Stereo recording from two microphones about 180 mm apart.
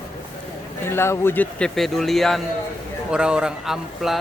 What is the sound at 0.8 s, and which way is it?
Speech, 15° left (ahead or behind).